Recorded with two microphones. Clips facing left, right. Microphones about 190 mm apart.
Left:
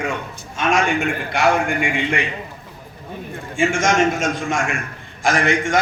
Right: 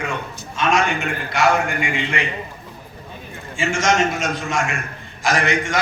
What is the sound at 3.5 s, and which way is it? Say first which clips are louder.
A man's voice: left 2 dB; 55° left (ahead or behind).